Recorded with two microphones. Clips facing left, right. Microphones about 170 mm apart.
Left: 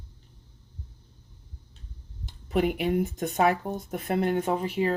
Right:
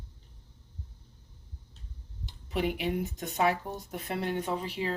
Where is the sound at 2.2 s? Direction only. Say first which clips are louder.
Left 5 dB; 50° left (ahead or behind).